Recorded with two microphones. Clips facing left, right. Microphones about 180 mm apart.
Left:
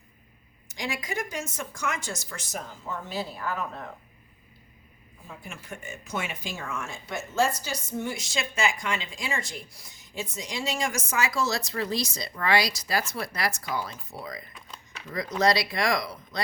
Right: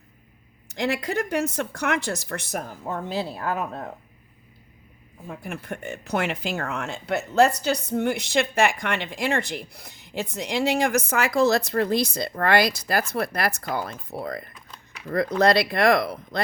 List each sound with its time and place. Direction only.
0.7 s speech: 65° right (ahead or behind)
5.3 s speech: 60° right (ahead or behind)